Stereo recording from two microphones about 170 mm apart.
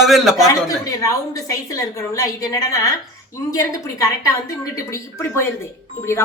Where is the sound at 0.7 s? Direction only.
20° left (ahead or behind).